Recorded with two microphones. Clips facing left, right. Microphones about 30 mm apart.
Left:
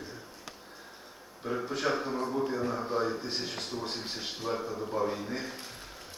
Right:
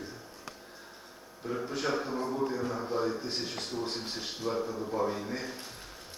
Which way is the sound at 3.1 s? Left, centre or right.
Centre.